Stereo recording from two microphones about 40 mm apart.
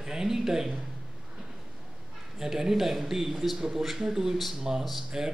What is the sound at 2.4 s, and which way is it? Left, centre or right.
Speech, centre.